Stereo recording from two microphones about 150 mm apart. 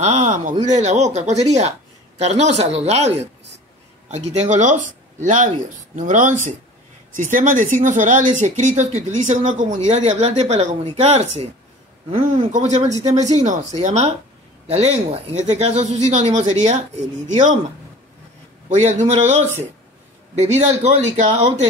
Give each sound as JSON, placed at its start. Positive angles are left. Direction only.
{"t": 0.0, "sound": "speech", "side_deg": -55}
{"t": 12.5, "sound": "speech", "side_deg": -50}
{"t": 18.7, "sound": "speech", "side_deg": -55}
{"t": 20.4, "sound": "speech", "side_deg": -50}